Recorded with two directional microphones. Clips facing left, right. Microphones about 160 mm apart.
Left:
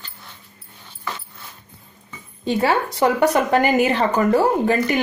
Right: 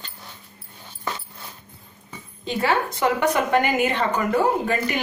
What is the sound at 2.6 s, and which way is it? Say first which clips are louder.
Speech: left 3 dB; 35° left (ahead or behind).